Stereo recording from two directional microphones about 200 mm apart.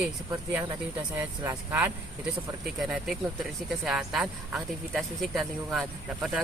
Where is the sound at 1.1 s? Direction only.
15° right (ahead or behind).